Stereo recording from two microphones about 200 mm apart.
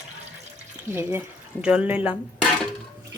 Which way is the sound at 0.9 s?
10° right (ahead or behind).